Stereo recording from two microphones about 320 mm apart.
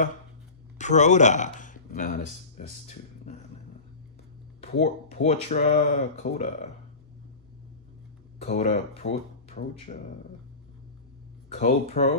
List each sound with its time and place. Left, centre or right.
0.7 s speech: left
4.6 s speech: left
8.4 s speech: left
11.4 s speech: centre